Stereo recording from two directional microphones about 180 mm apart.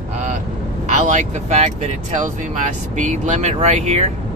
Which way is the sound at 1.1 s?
40° right (ahead or behind).